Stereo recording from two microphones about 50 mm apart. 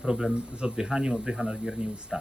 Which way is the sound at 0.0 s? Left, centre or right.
Centre.